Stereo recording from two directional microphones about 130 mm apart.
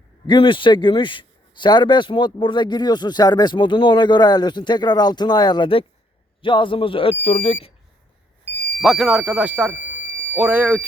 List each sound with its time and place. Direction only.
0.3 s a man's voice: 40° left (ahead or behind)
8.8 s speech: centre (ahead or behind)